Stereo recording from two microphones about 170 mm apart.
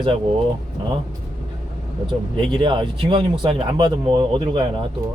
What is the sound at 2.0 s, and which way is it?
Speech, 30° right (ahead or behind).